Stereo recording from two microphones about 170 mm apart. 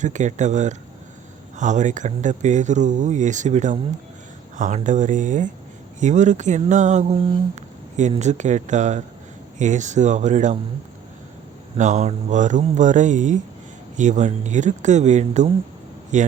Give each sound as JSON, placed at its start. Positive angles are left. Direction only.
{"t": 0.0, "sound": "speech", "side_deg": -45}
{"t": 8.2, "sound": "speech", "side_deg": -45}
{"t": 11.8, "sound": "speech", "side_deg": -45}